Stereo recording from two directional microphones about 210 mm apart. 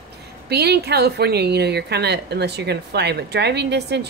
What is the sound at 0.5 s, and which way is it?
Speech, 50° right (ahead or behind).